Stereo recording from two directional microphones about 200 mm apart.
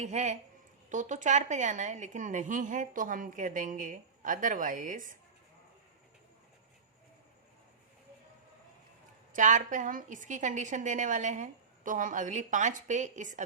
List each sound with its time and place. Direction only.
0.0 s a woman's voice: 35° right (ahead or behind)
9.3 s a woman's voice: 40° right (ahead or behind)